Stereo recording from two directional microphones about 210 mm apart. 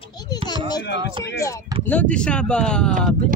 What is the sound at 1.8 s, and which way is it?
Speech, 5° left (ahead or behind).